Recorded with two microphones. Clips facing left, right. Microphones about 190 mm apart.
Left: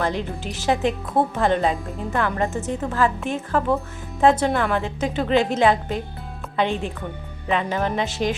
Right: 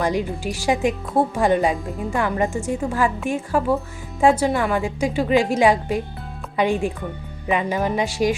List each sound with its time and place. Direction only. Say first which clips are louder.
0.0 s a woman's voice: right 3 dB; 10° right (ahead or behind)